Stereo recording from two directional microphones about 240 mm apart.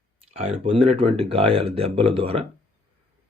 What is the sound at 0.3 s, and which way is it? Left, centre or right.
Speech, right.